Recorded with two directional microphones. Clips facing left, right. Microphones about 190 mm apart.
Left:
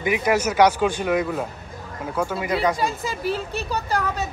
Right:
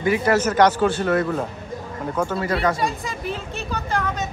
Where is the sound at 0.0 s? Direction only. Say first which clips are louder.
Right 2 dB; 15° left (ahead or behind).